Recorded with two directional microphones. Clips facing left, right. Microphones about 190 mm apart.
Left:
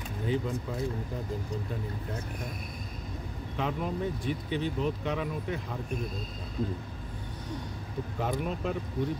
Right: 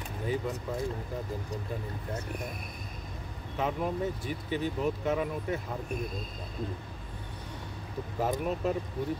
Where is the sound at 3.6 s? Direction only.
5° right (ahead or behind).